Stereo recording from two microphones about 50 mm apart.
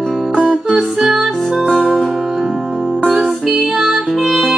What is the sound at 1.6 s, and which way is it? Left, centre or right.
Music, centre.